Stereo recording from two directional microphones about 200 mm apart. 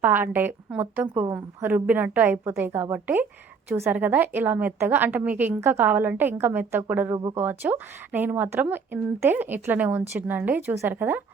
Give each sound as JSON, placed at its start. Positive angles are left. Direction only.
{"t": 0.0, "sound": "speech", "side_deg": -10}